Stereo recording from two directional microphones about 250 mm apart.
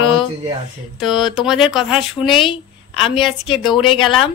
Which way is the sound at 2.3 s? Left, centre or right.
Centre.